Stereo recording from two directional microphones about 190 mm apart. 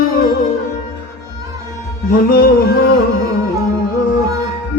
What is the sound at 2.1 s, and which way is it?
Music, 50° left (ahead or behind).